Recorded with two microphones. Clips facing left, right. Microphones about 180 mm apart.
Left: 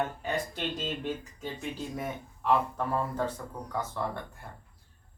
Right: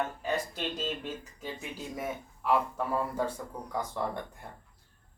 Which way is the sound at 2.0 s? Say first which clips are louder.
Even; 5° right (ahead or behind).